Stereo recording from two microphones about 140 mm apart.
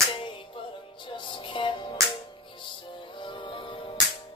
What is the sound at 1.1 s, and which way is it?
Music, 35° left (ahead or behind).